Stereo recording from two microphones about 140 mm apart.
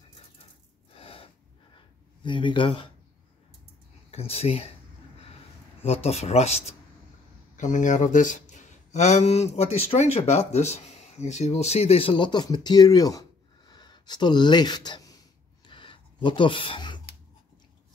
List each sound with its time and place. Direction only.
0.9 s gasp: 45° left (ahead or behind)
2.2 s speech: 35° left (ahead or behind)
4.1 s speech: 45° left (ahead or behind)
5.8 s speech: 45° left (ahead or behind)
7.5 s speech: 60° left (ahead or behind); by 13.2 s 25° left (ahead or behind)
13.7 s a sound: 30° left (ahead or behind)